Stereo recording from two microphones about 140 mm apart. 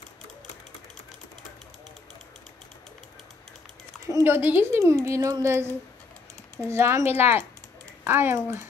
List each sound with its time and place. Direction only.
4.0 s speech: 20° right (ahead or behind)